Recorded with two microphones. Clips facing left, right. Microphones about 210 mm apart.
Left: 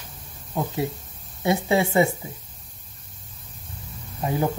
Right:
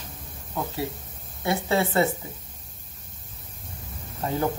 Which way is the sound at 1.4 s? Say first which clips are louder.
Left 3 dB; 15° left (ahead or behind).